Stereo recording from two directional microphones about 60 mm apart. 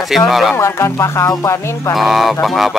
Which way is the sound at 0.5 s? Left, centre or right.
Left.